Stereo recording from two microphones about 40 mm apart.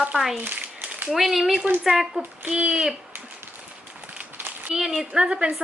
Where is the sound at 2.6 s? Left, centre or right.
Right.